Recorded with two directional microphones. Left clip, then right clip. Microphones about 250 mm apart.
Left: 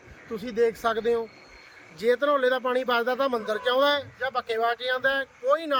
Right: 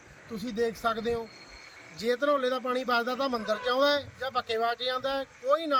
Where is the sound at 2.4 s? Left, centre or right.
Left.